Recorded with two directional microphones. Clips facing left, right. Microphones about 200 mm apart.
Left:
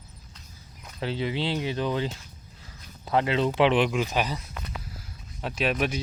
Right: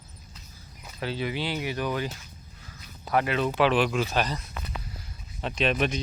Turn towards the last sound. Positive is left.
turn(degrees=10)  # may be behind; listen again after turning